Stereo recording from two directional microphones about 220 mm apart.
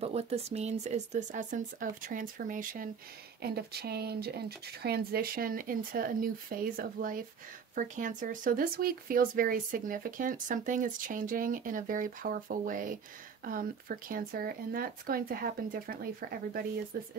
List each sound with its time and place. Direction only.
0.0 s speech: 30° right (ahead or behind)